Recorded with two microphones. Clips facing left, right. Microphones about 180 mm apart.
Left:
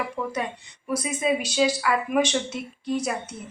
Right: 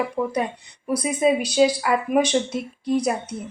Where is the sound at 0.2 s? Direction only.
35° right (ahead or behind).